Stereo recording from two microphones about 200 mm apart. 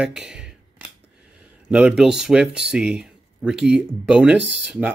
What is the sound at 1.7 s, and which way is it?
Speech, 5° right (ahead or behind).